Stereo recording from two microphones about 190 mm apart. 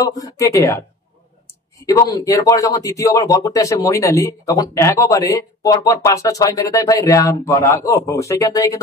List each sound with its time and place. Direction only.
0.0 s speech: 20° left (ahead or behind)
1.9 s speech: 20° left (ahead or behind)